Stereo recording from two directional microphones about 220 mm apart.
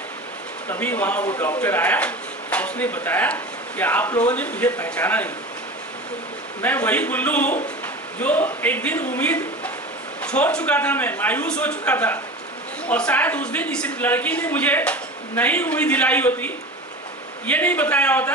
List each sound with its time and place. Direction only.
0.7 s speech: 10° left (ahead or behind)
6.6 s speech: 10° left (ahead or behind)